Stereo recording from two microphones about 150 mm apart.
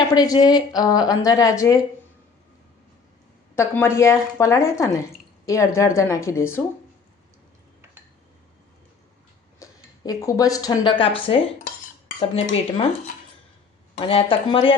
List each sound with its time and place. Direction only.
0.1 s speech: 25° left (ahead or behind)
3.5 s speech: 15° left (ahead or behind)
9.6 s speech: 25° left (ahead or behind); by 12.8 s 40° left (ahead or behind)
14.0 s speech: 35° left (ahead or behind)